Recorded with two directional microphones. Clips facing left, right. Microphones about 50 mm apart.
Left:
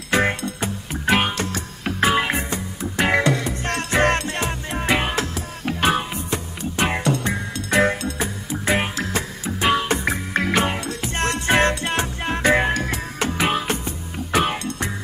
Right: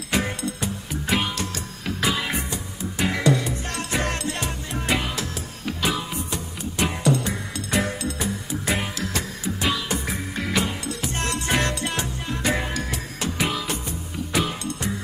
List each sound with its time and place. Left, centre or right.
0.1 s music: left